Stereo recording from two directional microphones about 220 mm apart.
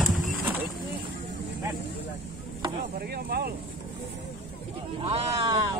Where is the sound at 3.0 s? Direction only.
45° right (ahead or behind).